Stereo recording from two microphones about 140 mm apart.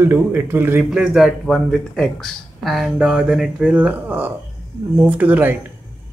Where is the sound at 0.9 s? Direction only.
5° right (ahead or behind).